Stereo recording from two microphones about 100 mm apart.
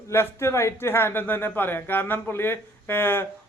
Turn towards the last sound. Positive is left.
turn(degrees=20)  # may be behind; listen again after turning